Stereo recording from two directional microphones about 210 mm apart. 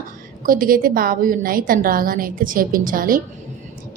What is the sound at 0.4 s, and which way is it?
A woman's voice, 40° right (ahead or behind).